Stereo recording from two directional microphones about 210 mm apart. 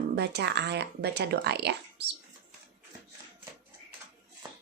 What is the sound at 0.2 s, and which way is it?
Speech, 50° right (ahead or behind).